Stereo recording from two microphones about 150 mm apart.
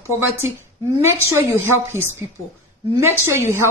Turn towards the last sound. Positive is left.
turn(degrees=-20)  # may be behind; listen again after turning